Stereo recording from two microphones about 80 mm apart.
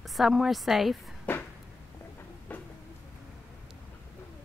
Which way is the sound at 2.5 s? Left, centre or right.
Left.